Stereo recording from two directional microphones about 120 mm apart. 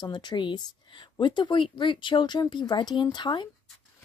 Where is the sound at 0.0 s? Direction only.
40° left (ahead or behind).